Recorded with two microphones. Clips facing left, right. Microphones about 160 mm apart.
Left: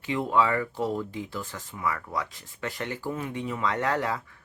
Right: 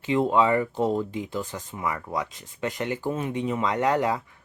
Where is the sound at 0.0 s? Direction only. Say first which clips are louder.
Right 4 dB; 25° right (ahead or behind).